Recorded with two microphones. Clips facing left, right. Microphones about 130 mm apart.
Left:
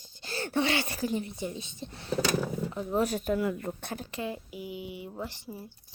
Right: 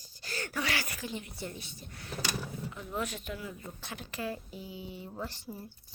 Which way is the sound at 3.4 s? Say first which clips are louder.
Left 12 dB; 65° left (ahead or behind).